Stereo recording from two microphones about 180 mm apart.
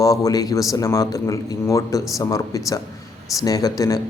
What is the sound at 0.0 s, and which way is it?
A man's voice, 20° left (ahead or behind).